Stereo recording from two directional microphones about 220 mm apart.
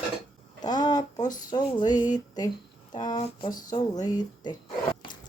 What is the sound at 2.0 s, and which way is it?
Speech, 15° left (ahead or behind).